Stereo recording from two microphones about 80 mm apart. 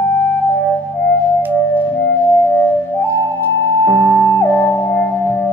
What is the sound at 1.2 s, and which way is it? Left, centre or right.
Music, left.